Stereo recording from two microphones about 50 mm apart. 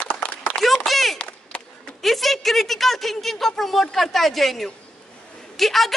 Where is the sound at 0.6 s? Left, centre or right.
Centre.